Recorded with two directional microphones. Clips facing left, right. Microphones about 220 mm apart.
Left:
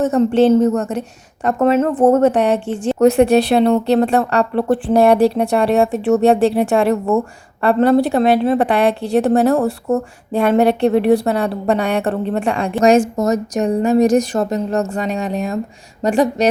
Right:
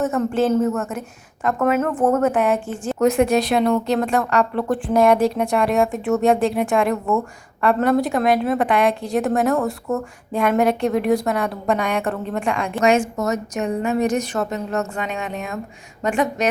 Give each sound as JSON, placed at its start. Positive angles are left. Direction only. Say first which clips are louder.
{"t": 0.2, "sound": "a woman's voice", "louder": "left 9 dB", "side_deg": 25}
{"t": 0.7, "sound": "a woman's voice", "louder": "left 5 dB", "side_deg": 40}